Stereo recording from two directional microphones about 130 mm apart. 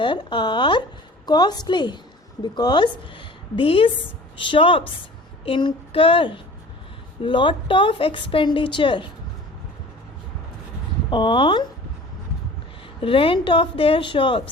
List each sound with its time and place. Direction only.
0.0 s a woman's voice: 35° left (ahead or behind)
3.5 s child singing: 45° left (ahead or behind)
4.4 s a woman's voice: 40° left (ahead or behind)
5.5 s child singing: 40° left (ahead or behind)
7.2 s a woman's voice: 40° left (ahead or behind)
11.1 s a woman's voice: 40° left (ahead or behind)
13.0 s a woman's voice: 45° left (ahead or behind)